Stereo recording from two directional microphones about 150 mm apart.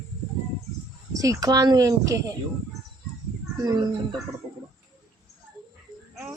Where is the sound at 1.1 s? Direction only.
25° right (ahead or behind).